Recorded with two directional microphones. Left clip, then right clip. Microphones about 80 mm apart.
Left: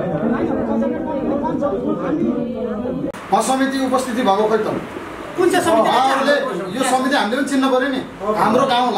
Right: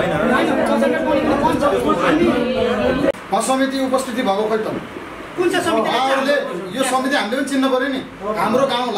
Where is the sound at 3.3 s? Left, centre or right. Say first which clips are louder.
Left 1 dB; centre.